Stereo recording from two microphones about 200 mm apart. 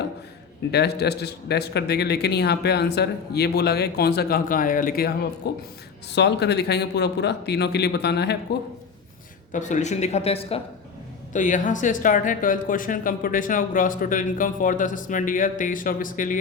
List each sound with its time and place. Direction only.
0.7 s speech: 55° left (ahead or behind)
9.5 s speech: 40° left (ahead or behind)
11.3 s speech: 40° left (ahead or behind)